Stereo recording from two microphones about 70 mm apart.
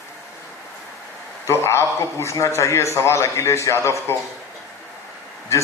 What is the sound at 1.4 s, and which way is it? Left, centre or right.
A man's voice, left.